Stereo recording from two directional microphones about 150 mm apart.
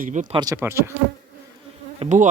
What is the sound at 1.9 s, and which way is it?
Insect, 55° right (ahead or behind).